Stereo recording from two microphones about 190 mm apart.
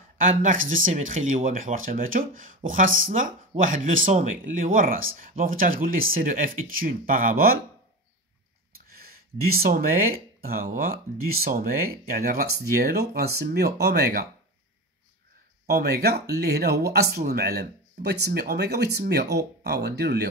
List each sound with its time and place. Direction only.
0.2 s speech: 45° right (ahead or behind)
8.8 s a sound: 50° right (ahead or behind)
10.4 s speech: 50° right (ahead or behind)
15.6 s speech: 55° right (ahead or behind)